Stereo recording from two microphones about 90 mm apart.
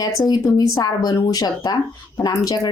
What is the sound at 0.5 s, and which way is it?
Speech, 45° left (ahead or behind).